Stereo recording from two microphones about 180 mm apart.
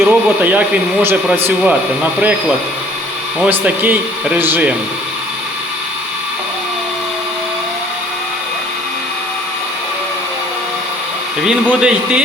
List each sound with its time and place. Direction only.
0.0 s speech: 10° right (ahead or behind)
3.4 s speech: 10° right (ahead or behind)
11.4 s speech: 5° right (ahead or behind)